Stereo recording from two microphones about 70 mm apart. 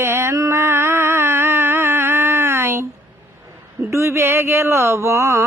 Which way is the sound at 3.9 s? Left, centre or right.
Right.